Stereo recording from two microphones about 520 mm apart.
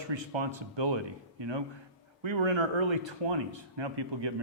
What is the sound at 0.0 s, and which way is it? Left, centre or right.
Speech, right.